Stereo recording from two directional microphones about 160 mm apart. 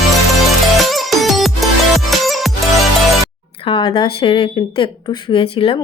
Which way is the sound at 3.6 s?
35° left (ahead or behind).